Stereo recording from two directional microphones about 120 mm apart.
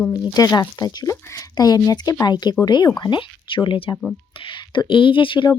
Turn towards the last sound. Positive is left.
turn(degrees=45)  # may be behind; listen again after turning